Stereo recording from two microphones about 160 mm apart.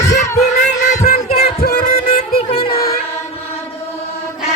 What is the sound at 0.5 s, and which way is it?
Music, 50° left (ahead or behind).